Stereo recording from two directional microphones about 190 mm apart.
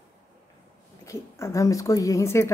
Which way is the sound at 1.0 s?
15° left (ahead or behind).